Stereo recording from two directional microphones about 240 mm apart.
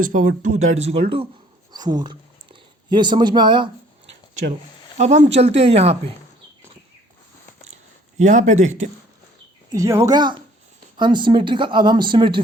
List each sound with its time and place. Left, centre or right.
0.0 s speech: right
4.9 s speech: right
8.2 s speech: right
9.6 s speech: centre